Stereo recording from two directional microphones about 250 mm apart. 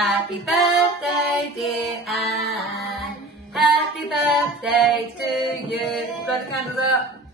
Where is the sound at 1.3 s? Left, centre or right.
Centre.